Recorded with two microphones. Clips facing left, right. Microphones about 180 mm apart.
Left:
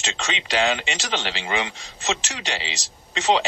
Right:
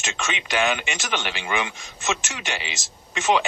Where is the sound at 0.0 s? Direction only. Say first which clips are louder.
Even; 30° left (ahead or behind).